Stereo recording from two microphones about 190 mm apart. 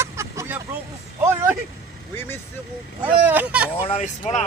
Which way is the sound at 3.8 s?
35° left (ahead or behind).